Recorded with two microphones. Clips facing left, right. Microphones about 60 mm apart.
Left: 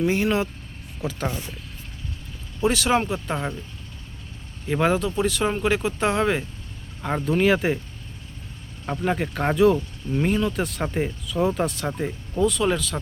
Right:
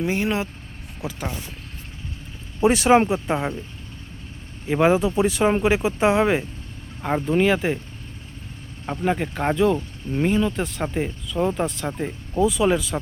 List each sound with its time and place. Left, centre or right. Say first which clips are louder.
0.0 s speech: left 2 dB; centre
2.6 s speech: right 5 dB; right
4.6 s speech: right 3 dB; centre
8.9 s speech: right 1 dB; centre
9.7 s speech: even; centre
10.2 s speech: right 2 dB; centre
12.4 s speech: right 2 dB; centre